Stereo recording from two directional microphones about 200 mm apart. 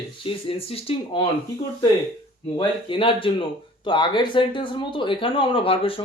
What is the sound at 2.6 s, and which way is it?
Speech, 25° left (ahead or behind).